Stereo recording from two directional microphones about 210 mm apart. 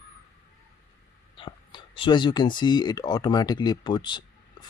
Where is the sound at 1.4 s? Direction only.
25° left (ahead or behind).